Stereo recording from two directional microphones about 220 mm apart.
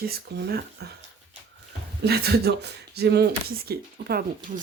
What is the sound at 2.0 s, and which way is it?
Speech, 45° right (ahead or behind).